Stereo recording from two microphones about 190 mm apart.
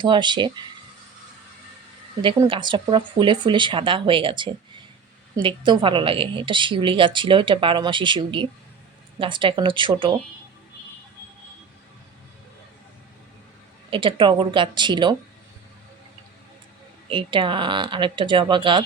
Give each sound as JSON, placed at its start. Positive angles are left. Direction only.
{"t": 0.0, "sound": "a woman's voice", "side_deg": -25}
{"t": 2.2, "sound": "a woman's voice", "side_deg": -25}
{"t": 13.9, "sound": "a woman's voice", "side_deg": -25}
{"t": 17.1, "sound": "a woman's voice", "side_deg": -25}